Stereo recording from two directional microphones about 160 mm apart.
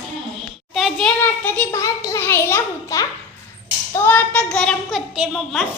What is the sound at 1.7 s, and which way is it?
A child's voice, 20° left (ahead or behind).